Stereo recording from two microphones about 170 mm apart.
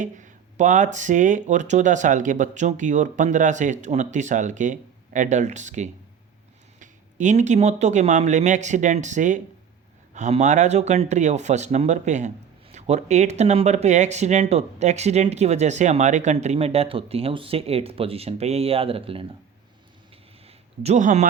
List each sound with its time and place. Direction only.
0.0 s speech: 45° right (ahead or behind)
20.8 s speech: 45° right (ahead or behind)